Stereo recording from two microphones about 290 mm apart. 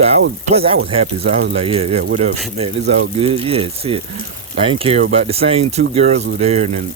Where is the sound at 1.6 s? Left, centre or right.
Centre.